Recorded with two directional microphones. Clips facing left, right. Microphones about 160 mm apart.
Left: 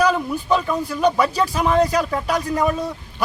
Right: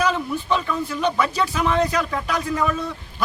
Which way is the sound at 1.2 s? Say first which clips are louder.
Left 2 dB; 35° left (ahead or behind).